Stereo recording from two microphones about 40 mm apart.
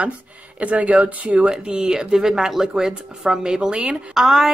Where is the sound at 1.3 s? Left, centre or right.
Right.